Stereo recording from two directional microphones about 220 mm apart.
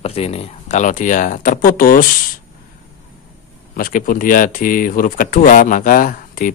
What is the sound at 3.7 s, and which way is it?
Speech, 40° left (ahead or behind).